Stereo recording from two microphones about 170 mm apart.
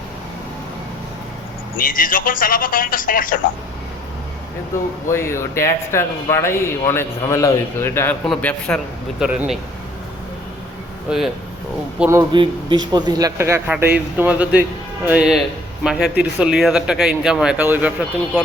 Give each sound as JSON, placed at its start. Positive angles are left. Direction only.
{"t": 1.8, "sound": "speech", "side_deg": 55}
{"t": 5.0, "sound": "speech", "side_deg": 15}
{"t": 9.2, "sound": "speech", "side_deg": -5}
{"t": 11.1, "sound": "speech", "side_deg": -5}
{"t": 12.3, "sound": "speech", "side_deg": -30}